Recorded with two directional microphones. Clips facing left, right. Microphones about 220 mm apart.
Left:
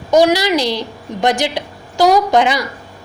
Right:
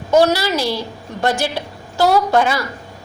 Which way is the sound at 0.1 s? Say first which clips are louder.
Left 2 dB; 15° left (ahead or behind).